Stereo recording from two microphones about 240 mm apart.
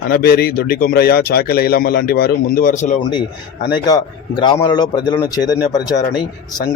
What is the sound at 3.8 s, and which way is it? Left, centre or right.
A man's voice, centre.